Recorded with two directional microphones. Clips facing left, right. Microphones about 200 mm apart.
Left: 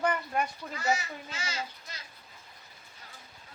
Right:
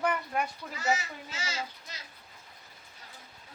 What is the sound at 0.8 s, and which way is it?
Speech, 20° right (ahead or behind).